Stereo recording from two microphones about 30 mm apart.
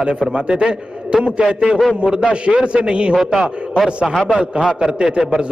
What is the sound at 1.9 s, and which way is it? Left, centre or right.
A man's voice, right.